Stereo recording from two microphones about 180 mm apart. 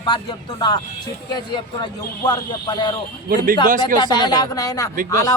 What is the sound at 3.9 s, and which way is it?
Speech, 25° left (ahead or behind).